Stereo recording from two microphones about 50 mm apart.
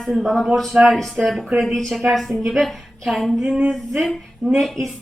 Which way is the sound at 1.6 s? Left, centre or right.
Centre.